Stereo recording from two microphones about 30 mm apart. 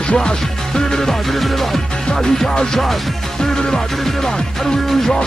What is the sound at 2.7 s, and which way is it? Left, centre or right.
Music, centre.